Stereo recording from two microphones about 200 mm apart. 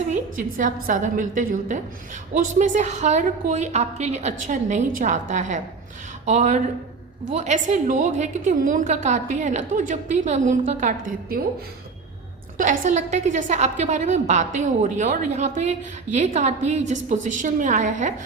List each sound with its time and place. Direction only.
0.1 s a woman's voice: 40° right (ahead or behind)
12.5 s a woman's voice: 40° right (ahead or behind)